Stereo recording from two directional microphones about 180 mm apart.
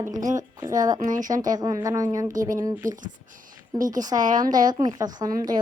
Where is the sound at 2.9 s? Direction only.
45° right (ahead or behind).